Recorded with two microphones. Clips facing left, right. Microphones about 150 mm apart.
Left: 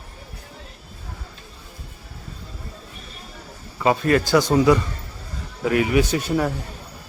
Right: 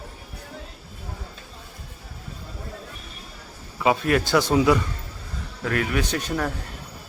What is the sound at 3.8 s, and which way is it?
A man's voice, centre (ahead or behind).